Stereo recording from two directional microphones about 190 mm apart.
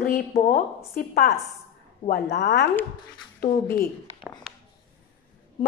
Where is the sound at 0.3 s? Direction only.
40° left (ahead or behind).